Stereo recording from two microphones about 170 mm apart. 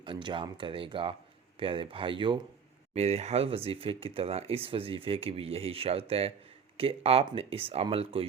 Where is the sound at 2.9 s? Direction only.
40° right (ahead or behind).